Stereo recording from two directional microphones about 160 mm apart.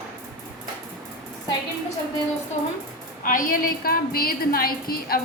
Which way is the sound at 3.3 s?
60° left (ahead or behind).